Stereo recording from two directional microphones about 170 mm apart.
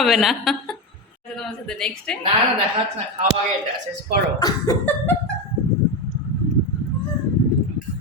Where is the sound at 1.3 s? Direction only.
5° left (ahead or behind).